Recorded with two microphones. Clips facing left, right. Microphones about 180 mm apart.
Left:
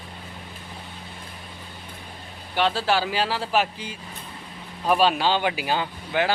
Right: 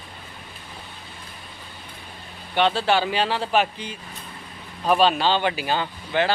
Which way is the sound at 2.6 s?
5° left (ahead or behind).